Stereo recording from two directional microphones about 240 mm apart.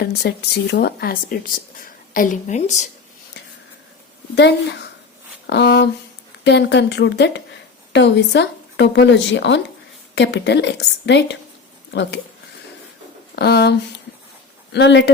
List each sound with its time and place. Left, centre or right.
0.0 s speech: left
4.4 s a woman's voice: left
13.3 s a woman's voice: left